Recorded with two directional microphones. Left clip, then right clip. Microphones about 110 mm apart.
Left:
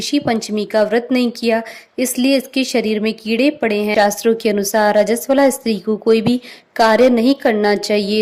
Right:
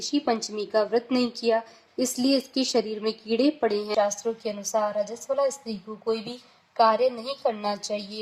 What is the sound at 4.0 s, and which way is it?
A woman's voice, 25° left (ahead or behind).